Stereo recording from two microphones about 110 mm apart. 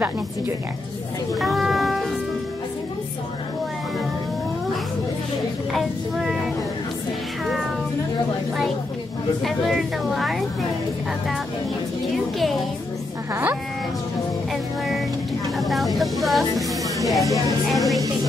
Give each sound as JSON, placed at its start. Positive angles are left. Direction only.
{"t": 1.3, "sound": "music", "side_deg": 0}
{"t": 5.7, "sound": "speech", "side_deg": 0}
{"t": 9.4, "sound": "speech", "side_deg": 0}
{"t": 14.5, "sound": "speech", "side_deg": 0}